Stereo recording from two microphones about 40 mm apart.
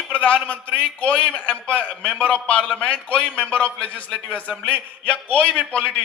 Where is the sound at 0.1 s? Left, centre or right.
Left.